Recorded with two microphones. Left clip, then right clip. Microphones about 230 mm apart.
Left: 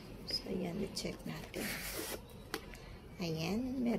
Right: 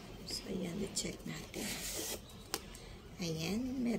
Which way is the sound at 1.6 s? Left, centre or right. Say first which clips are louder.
Left 1 dB; centre.